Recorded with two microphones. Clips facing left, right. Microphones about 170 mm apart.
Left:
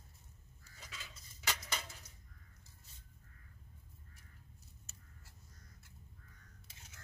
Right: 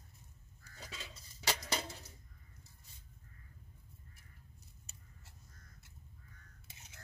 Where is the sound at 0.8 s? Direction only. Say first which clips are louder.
Right 4 dB; 30° right (ahead or behind).